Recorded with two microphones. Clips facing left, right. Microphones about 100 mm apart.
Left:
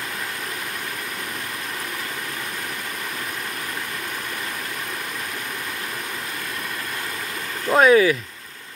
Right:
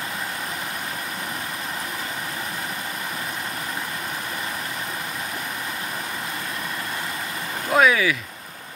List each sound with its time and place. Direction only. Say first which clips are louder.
7.7 s speech: left 4 dB; 35° left (ahead or behind)